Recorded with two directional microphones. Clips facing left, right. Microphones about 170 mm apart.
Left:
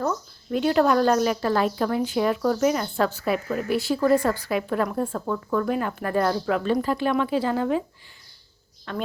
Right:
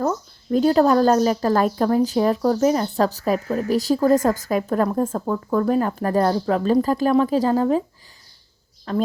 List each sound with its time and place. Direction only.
0.5 s a woman's voice: 35° right (ahead or behind)
8.9 s a woman's voice: 35° right (ahead or behind)